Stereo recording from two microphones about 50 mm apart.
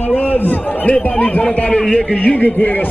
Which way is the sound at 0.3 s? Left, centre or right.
Left.